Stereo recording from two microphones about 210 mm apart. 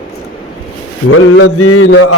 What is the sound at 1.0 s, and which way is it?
Mantra, 75° left (ahead or behind).